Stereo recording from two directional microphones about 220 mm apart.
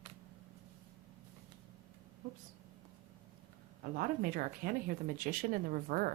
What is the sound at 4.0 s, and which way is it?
A woman's voice, 40° right (ahead or behind).